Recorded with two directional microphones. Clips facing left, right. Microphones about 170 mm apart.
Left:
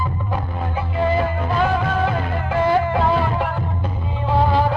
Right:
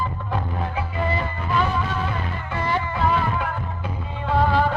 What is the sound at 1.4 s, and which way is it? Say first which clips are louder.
Music: left 4 dB; 55° left (ahead or behind).